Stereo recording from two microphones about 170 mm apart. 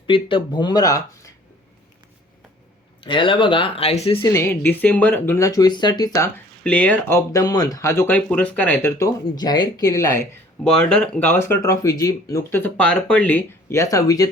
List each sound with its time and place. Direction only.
0.1 s speech: 30° left (ahead or behind)
3.0 s speech: 30° left (ahead or behind)
4.3 s speech: 15° left (ahead or behind)
10.6 s speech: 5° left (ahead or behind); by 14.3 s 20° left (ahead or behind)